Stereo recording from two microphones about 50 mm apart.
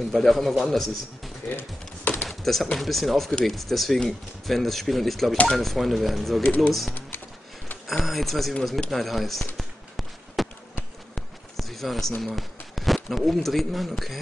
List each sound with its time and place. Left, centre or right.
0.1 s a man's voice: centre
1.6 s a sound: left
2.2 s chopping: centre
2.8 s a man's voice: centre
6.4 s speech: left
7.8 s a man's voice: centre
9.6 s a sound: centre
12.2 s speech: centre